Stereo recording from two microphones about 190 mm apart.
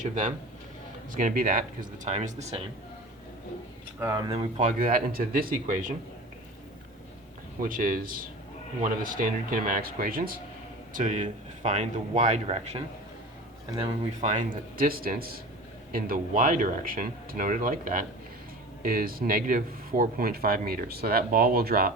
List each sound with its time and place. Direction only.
0.1 s speech: 40° right (ahead or behind)
4.0 s speech: 20° right (ahead or behind)
4.3 s speech: 30° right (ahead or behind)
4.8 s speech: 45° right (ahead or behind)
7.6 s speech: 45° right (ahead or behind)